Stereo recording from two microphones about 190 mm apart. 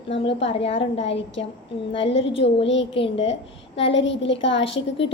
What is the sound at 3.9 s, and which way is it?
Speech, 75° left (ahead or behind).